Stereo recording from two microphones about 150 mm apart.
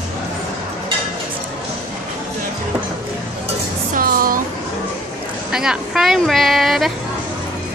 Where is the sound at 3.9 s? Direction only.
75° right (ahead or behind).